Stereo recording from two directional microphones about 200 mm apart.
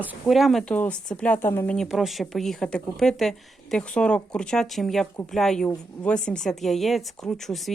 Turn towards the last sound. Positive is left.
turn(degrees=0)  # may be behind; listen again after turning